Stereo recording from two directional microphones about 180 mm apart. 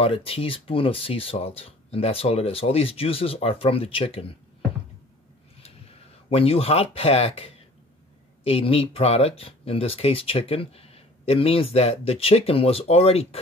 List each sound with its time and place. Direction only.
0.0 s speech: 30° left (ahead or behind)
6.3 s speech: 35° left (ahead or behind)